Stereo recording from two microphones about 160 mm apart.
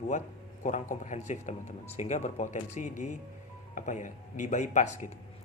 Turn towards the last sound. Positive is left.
turn(degrees=50)  # may be behind; listen again after turning